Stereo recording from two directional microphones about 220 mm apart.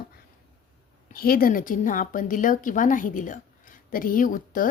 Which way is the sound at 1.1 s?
40° left (ahead or behind).